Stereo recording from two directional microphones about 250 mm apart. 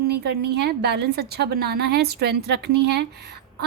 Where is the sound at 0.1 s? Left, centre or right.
Right.